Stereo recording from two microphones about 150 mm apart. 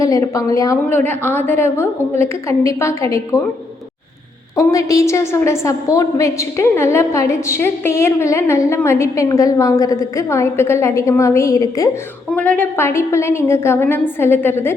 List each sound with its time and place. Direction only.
0.0 s a woman's voice: 20° left (ahead or behind)
4.5 s a woman's voice: 20° left (ahead or behind)
12.3 s a woman's voice: 10° left (ahead or behind)